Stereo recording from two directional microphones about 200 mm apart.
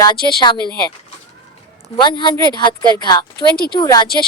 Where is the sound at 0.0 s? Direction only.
20° left (ahead or behind).